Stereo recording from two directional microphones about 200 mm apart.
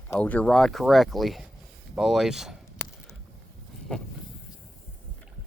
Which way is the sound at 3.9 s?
5° left (ahead or behind).